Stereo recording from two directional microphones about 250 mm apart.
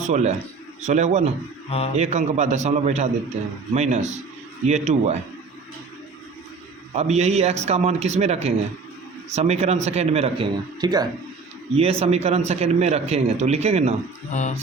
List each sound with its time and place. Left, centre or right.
0.0 s a man's voice: right
6.9 s a man's voice: right